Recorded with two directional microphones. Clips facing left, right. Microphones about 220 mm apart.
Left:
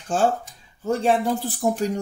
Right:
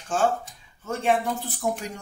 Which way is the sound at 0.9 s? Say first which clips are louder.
Left 4 dB; 35° left (ahead or behind).